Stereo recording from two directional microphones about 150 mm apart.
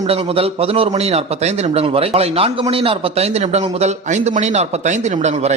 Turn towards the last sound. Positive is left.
turn(degrees=-50)  # may be behind; listen again after turning